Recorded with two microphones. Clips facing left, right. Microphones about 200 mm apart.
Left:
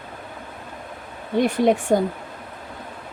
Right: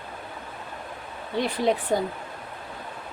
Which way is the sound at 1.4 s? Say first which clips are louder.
Left 6 dB; 50° left (ahead or behind).